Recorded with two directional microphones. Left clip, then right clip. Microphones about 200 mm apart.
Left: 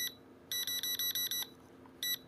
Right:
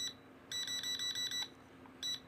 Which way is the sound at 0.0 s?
45° left (ahead or behind).